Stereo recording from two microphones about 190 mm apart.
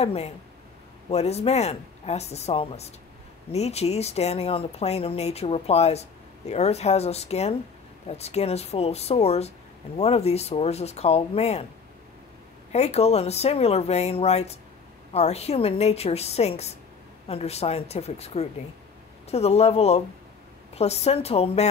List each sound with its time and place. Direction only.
0.0 s speech: 35° left (ahead or behind)
12.7 s speech: 35° left (ahead or behind)